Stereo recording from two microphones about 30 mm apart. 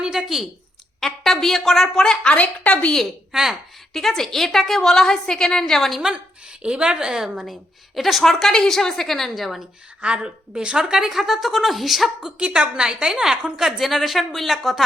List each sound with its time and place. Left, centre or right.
0.2 s speech: right
0.9 s a woman's voice: centre
2.2 s a woman's voice: left
3.9 s a woman's voice: centre
4.8 s a woman's voice: centre
6.0 s a woman's voice: right
7.1 s a woman's voice: centre
7.9 s a woman's voice: centre
9.3 s speech: centre
10.0 s a woman's voice: right
10.8 s speech: right
11.1 s speech: centre
12.4 s a woman's voice: right
13.7 s speech: centre